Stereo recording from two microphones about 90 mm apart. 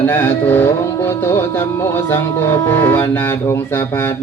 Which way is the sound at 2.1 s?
30° left (ahead or behind).